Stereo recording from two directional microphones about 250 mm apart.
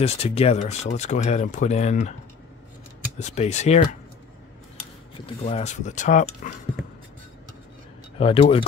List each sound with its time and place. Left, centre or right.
0.0 s speech: left
3.2 s speech: left
5.2 s speech: left
8.2 s speech: left